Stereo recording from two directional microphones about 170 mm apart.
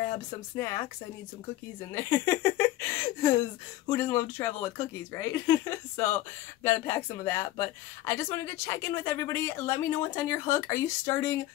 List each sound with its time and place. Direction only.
0.6 s speech: 20° left (ahead or behind)
2.0 s speech: 15° left (ahead or behind)